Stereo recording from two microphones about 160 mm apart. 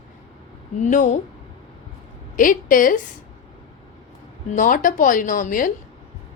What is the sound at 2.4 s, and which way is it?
Speech, 60° left (ahead or behind).